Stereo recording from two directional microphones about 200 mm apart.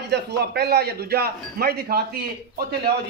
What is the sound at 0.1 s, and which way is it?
Speech, 55° right (ahead or behind).